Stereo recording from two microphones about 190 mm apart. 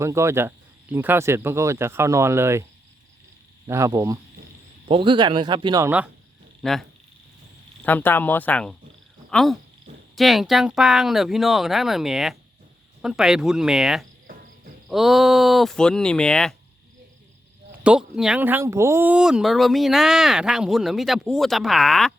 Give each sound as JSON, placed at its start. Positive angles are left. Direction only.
{"t": 0.0, "sound": "speech", "side_deg": -15}
{"t": 3.7, "sound": "speech", "side_deg": -15}
{"t": 6.6, "sound": "speech", "side_deg": 0}
{"t": 7.9, "sound": "speech", "side_deg": 10}
{"t": 17.8, "sound": "speech", "side_deg": -5}